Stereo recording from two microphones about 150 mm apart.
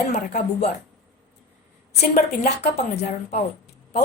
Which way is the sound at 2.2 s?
90° left.